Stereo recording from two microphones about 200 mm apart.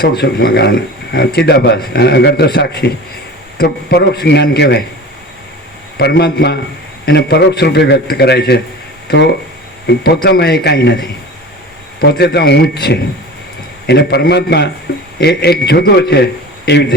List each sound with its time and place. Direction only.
0.0 s a man's voice: 55° left (ahead or behind)
6.0 s a man's voice: 55° left (ahead or behind)